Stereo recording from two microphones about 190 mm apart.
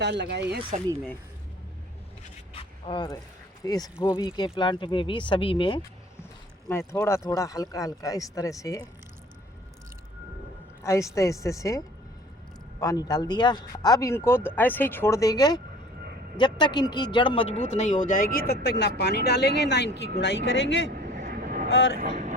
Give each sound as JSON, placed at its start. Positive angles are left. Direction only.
{"t": 0.0, "sound": "speech", "side_deg": -65}
{"t": 2.5, "sound": "a sound", "side_deg": 25}
{"t": 3.6, "sound": "speech", "side_deg": 20}
{"t": 6.7, "sound": "speech", "side_deg": 15}
{"t": 10.8, "sound": "speech", "side_deg": 15}
{"t": 12.8, "sound": "speech", "side_deg": 20}
{"t": 18.1, "sound": "speech", "side_deg": 50}
{"t": 20.9, "sound": "vehicle", "side_deg": -50}
{"t": 21.7, "sound": "speech", "side_deg": 70}
{"t": 21.9, "sound": "speech", "side_deg": -45}